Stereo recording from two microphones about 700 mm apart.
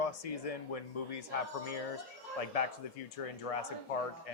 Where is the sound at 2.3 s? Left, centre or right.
Left.